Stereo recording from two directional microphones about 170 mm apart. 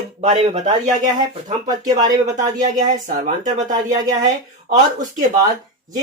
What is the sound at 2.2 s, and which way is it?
Speech, 45° right (ahead or behind).